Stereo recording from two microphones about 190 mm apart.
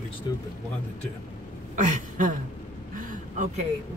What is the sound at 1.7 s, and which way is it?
Speech, 40° right (ahead or behind).